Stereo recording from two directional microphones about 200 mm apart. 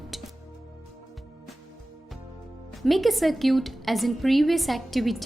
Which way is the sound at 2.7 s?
Centre (ahead or behind).